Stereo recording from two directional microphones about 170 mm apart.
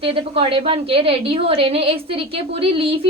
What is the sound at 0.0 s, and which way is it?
A woman's voice, 30° right (ahead or behind).